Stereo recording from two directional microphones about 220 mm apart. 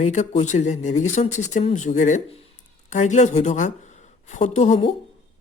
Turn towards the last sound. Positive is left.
turn(degrees=30)  # may be behind; listen again after turning